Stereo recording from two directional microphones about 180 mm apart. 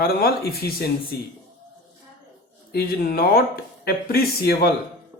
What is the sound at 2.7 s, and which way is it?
Speech, 60° left (ahead or behind).